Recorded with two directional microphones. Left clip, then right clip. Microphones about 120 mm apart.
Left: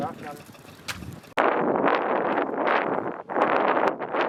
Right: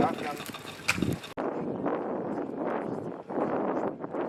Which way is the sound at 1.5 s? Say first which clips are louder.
Left 11 dB; 40° left (ahead or behind).